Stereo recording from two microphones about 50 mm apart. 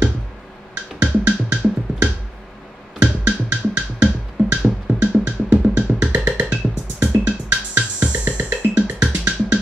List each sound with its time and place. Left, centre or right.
1.0 s music: right